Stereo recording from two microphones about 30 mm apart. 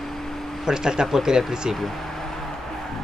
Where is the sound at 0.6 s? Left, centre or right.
Right.